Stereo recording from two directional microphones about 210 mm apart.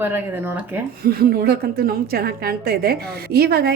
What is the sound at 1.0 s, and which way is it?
A woman's voice, 45° right (ahead or behind).